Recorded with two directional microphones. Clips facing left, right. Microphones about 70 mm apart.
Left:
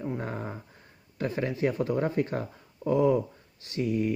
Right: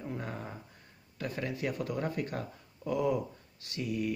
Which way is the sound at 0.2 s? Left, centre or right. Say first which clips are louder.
Left 6 dB; left.